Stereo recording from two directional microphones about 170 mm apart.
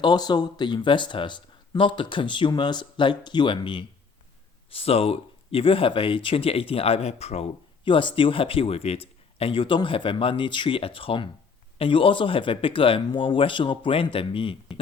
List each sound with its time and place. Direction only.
0.0 s speech: 25° left (ahead or behind)